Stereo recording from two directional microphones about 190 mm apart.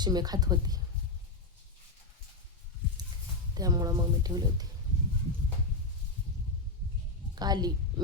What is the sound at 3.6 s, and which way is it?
Speech, 20° right (ahead or behind).